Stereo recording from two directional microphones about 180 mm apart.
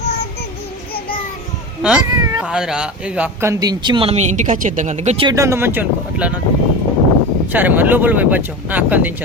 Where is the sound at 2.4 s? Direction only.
5° right (ahead or behind); by 5.2 s 40° right (ahead or behind).